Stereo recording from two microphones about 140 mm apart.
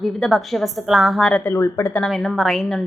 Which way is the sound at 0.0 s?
Centre (ahead or behind).